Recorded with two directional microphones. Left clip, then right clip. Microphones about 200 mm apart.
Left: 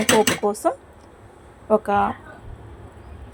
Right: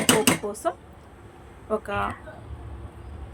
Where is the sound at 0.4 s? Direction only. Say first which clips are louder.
Left 7 dB; 35° left (ahead or behind).